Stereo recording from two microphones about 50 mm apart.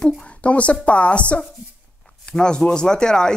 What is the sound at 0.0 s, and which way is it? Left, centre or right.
Speech, left.